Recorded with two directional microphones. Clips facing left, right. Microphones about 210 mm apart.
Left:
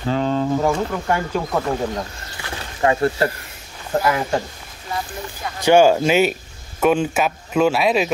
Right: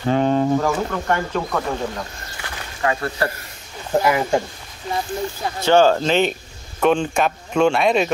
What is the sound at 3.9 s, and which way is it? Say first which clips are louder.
Speech: right 2 dB; 10° right (ahead or behind).